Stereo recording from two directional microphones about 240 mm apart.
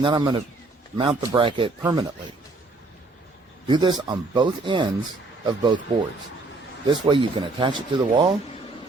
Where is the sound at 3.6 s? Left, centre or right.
Centre.